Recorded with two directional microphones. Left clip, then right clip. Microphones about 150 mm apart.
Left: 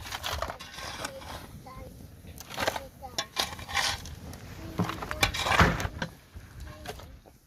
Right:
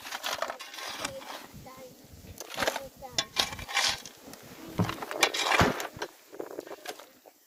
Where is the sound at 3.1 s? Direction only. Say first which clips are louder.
Right 2 dB; 20° left (ahead or behind).